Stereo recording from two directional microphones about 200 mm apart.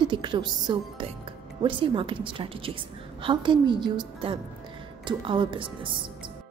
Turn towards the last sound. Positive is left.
turn(degrees=-25)  # may be behind; listen again after turning